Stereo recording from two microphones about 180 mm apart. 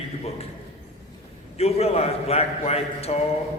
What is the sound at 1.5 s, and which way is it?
A man's voice, 35° left (ahead or behind).